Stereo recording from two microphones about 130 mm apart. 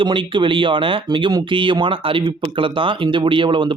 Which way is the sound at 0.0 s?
40° right (ahead or behind).